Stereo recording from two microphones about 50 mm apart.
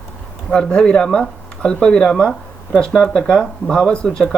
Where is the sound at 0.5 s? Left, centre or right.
Centre.